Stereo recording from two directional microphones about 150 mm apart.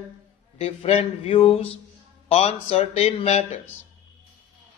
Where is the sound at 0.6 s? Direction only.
45° left (ahead or behind).